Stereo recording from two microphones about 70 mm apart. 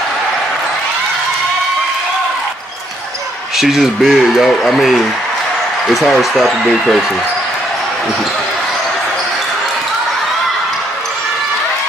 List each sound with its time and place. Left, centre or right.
3.5 s speech: centre